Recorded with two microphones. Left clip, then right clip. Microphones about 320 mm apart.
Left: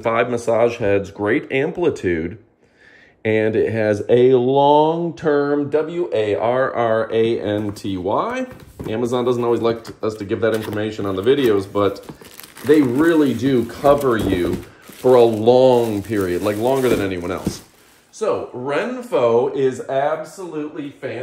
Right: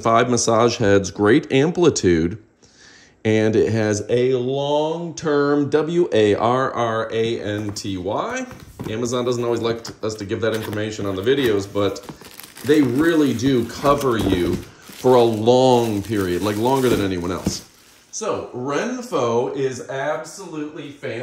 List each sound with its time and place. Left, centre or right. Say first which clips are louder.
0.0 s speech: right 2 dB; centre
5.3 s speech: even; centre
5.8 s speech: right 2 dB; right
6.3 s speech: left 1 dB; centre